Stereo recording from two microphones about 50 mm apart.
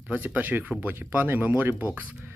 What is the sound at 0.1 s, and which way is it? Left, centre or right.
Speech, right.